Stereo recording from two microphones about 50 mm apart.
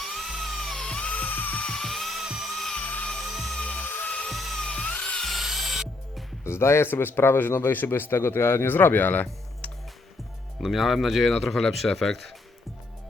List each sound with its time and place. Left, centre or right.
0.0 s music: centre
0.9 s music: centre
1.1 s music: left
1.6 s music: centre
2.2 s music: centre
2.5 s music: centre
2.8 s music: left
3.2 s music: centre
3.6 s music: left
4.3 s music: centre
4.6 s music: left
5.2 s music: centre
6.4 s speech: left
10.6 s speech: centre